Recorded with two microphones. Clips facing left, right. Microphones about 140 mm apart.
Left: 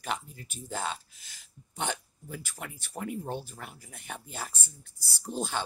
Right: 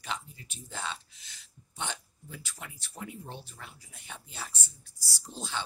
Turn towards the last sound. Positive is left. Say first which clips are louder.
# left 6 dB
turn(degrees=50)  # may be behind; listen again after turning